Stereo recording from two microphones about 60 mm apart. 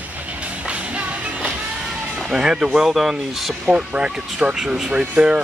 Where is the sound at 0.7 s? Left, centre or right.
Centre.